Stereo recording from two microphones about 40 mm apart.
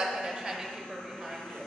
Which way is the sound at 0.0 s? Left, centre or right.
Centre.